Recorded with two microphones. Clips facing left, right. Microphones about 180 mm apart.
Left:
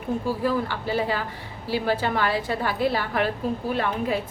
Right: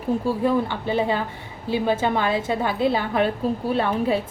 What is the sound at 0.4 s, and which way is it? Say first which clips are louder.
A woman's voice: right 4 dB; 20° right (ahead or behind).